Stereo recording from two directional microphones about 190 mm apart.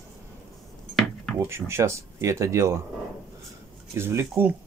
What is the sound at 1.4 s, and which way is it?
Speech, 15° right (ahead or behind).